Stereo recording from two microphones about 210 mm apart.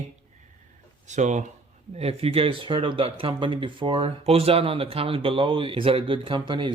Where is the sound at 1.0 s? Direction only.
35° right (ahead or behind).